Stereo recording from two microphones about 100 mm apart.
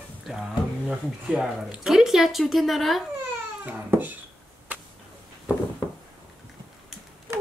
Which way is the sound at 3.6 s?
15° right (ahead or behind).